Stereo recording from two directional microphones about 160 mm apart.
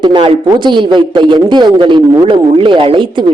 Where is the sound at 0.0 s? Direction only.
30° right (ahead or behind).